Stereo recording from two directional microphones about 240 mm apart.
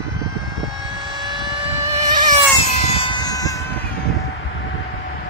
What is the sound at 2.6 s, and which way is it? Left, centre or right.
Music, left.